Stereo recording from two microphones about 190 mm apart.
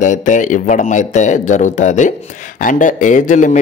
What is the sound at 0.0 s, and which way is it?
A man's voice, 40° left (ahead or behind).